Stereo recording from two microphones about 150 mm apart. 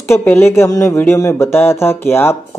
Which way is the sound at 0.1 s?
15° left (ahead or behind).